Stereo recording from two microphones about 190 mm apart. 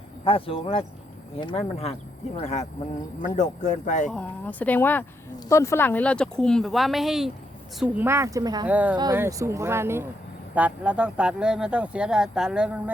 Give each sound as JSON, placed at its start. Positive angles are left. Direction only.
{"t": 0.3, "sound": "speech", "side_deg": 30}
{"t": 4.1, "sound": "speech", "side_deg": 5}
{"t": 8.6, "sound": "speech", "side_deg": -10}